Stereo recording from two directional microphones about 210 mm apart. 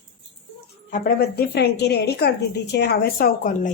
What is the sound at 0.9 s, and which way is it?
A woman's voice, 45° left (ahead or behind).